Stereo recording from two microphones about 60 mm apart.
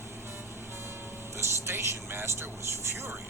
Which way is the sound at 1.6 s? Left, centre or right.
Right.